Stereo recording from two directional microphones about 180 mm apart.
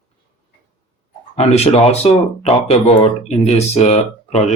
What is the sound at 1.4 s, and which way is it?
Speech, 35° left (ahead or behind).